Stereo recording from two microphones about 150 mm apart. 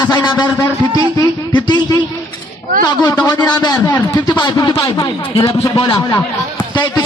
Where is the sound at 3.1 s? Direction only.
25° left (ahead or behind).